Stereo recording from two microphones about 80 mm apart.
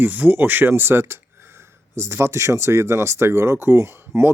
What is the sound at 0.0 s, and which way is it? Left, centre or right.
Speech, right.